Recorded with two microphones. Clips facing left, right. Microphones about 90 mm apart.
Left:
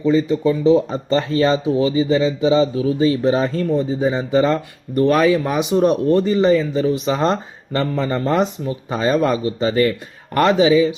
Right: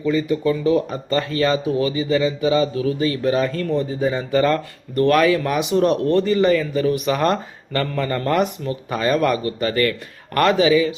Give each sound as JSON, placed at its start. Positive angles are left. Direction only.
{"t": 0.0, "sound": "speech", "side_deg": 25}